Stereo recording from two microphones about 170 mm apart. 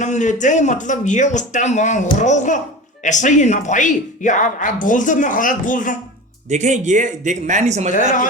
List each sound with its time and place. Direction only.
0.0 s speech: 45° left (ahead or behind)
6.5 s speech: 45° right (ahead or behind)
7.9 s speech: 50° left (ahead or behind)